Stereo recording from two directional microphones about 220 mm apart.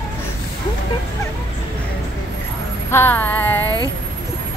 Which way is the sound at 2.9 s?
10° left (ahead or behind).